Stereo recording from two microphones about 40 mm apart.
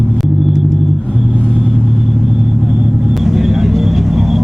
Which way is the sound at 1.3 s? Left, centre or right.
Left.